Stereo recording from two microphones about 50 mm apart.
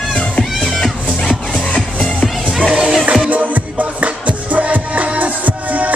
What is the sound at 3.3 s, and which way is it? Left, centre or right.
Music, right.